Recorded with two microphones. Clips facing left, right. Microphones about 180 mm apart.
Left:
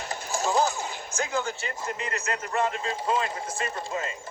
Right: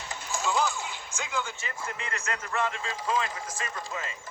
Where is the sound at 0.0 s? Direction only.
40° left (ahead or behind).